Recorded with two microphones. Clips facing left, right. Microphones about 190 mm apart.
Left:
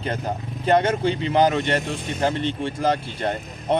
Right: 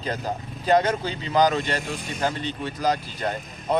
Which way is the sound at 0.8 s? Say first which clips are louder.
Left 4 dB; 25° left (ahead or behind).